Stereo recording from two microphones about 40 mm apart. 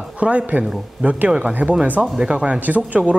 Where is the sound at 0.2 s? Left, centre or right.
Right.